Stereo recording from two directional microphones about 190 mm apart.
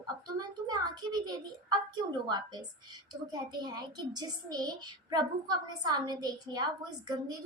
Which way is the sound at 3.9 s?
20° right (ahead or behind).